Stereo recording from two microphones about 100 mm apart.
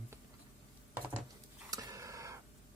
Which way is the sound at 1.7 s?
35° right (ahead or behind).